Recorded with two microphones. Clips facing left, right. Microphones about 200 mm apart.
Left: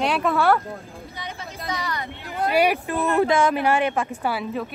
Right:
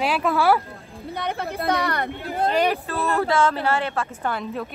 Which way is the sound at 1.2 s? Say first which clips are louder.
Right 9 dB; 60° right (ahead or behind).